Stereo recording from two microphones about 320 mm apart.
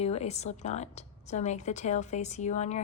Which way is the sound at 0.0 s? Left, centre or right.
Centre.